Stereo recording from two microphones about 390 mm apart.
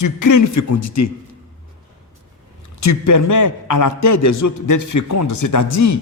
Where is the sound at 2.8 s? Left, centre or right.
Left.